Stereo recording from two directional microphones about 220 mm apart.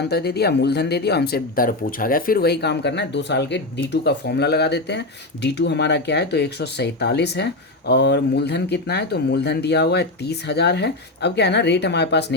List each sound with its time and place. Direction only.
0.0 s speech: 45° left (ahead or behind)